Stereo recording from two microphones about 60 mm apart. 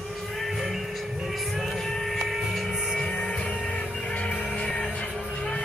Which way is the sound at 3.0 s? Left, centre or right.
Centre.